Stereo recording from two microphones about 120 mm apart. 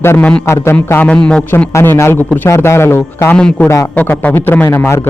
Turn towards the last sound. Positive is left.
turn(degrees=20)  # may be behind; listen again after turning